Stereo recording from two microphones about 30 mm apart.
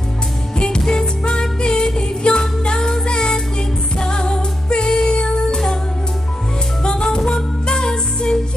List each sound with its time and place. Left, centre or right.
0.6 s music: left
3.9 s music: left
6.8 s music: left